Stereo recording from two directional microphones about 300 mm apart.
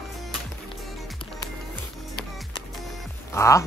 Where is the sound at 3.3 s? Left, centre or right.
Centre.